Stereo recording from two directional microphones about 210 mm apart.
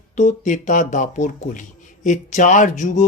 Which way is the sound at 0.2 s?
35° left (ahead or behind).